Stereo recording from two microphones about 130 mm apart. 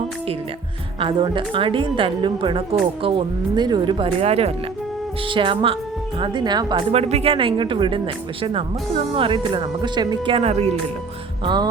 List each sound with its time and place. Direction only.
0.9 s a woman's voice: 40° right (ahead or behind)
5.3 s a woman's voice: 40° right (ahead or behind)
6.9 s speech: 50° right (ahead or behind)
11.4 s a woman's voice: 35° right (ahead or behind)